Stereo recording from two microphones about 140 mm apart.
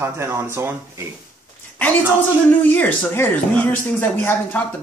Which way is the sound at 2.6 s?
10° left (ahead or behind).